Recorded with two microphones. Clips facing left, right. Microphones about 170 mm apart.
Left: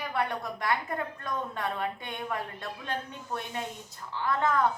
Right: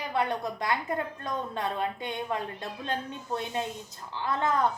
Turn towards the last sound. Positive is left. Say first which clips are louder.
# even
turn(degrees=-20)  # may be behind; listen again after turning